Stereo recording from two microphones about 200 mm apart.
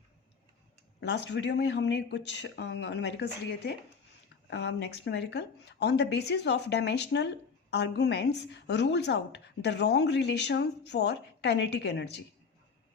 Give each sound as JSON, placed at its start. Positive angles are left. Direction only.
{"t": 1.0, "sound": "speech", "side_deg": 60}